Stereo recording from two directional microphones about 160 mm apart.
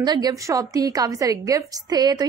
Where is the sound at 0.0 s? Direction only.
25° right (ahead or behind).